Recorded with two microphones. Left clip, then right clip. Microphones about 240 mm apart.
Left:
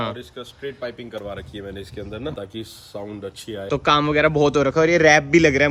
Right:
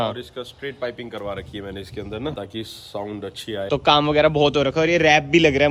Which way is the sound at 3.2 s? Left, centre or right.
Right.